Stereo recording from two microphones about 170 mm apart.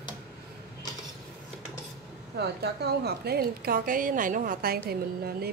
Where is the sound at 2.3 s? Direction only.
75° right (ahead or behind).